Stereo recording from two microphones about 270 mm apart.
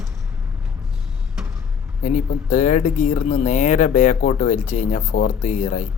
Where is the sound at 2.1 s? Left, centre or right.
Left.